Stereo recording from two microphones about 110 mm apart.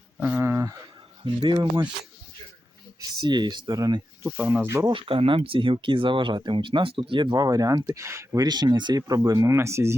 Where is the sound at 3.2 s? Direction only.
40° right (ahead or behind).